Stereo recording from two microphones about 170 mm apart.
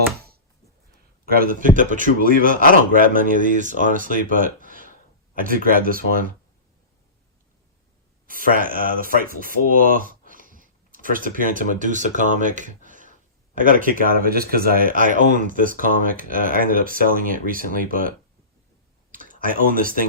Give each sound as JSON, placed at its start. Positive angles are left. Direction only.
{"t": 1.2, "sound": "a man's voice", "side_deg": -60}
{"t": 8.3, "sound": "a man's voice", "side_deg": -55}
{"t": 9.6, "sound": "a sound", "side_deg": -55}
{"t": 11.7, "sound": "a man's voice", "side_deg": -50}
{"t": 19.1, "sound": "speech", "side_deg": -55}